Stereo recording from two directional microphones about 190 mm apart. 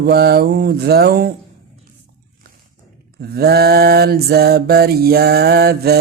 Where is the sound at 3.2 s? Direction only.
55° right (ahead or behind).